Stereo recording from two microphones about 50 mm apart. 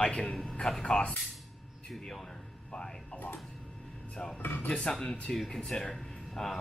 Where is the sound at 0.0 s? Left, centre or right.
Centre.